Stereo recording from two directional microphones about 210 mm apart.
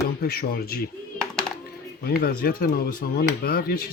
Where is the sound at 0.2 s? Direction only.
50° left (ahead or behind).